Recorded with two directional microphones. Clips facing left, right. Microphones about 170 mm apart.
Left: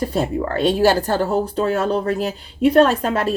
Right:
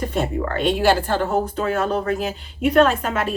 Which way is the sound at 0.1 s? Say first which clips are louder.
Left 2 dB; 35° left (ahead or behind).